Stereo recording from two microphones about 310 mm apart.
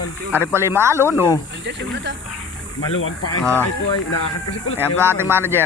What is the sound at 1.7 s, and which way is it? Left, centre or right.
Speech, right.